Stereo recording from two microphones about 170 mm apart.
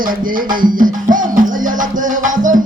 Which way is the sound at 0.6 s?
50° right (ahead or behind).